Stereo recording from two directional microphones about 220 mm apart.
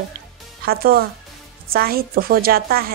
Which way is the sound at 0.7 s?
45° right (ahead or behind).